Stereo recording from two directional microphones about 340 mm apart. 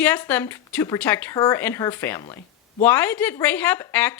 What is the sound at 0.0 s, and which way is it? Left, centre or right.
A woman's voice, centre.